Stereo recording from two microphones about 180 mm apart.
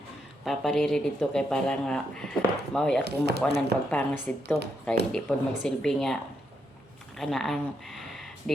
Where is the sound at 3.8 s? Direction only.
10° left (ahead or behind).